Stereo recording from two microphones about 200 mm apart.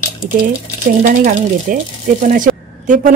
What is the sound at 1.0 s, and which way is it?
A woman's voice, 45° right (ahead or behind).